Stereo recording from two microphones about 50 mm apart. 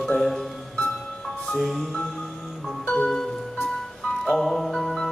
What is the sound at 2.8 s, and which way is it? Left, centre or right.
Music, left.